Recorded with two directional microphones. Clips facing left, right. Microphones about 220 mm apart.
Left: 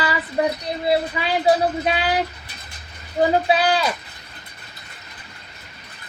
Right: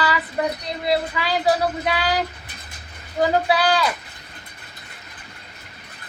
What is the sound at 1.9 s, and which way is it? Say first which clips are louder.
Speech: left 1 dB; 25° left (ahead or behind).